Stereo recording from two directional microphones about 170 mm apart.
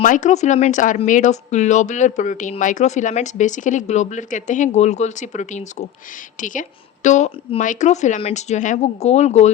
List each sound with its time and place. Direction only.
0.0 s speech: 45° left (ahead or behind)